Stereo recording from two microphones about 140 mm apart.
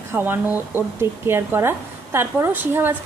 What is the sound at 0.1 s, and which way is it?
Speech, 15° right (ahead or behind).